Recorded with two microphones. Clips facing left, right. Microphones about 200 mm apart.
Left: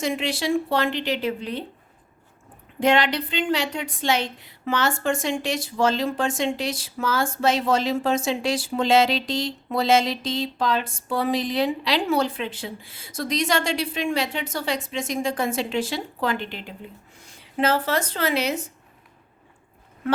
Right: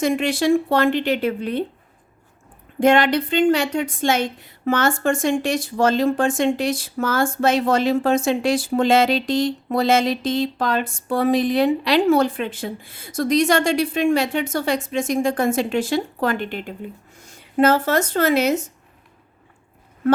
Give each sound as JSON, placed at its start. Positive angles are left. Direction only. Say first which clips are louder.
{"t": 0.0, "sound": "a woman's voice", "louder": "right 6 dB", "side_deg": -50}
{"t": 2.8, "sound": "a woman's voice", "louder": "right 5 dB", "side_deg": -50}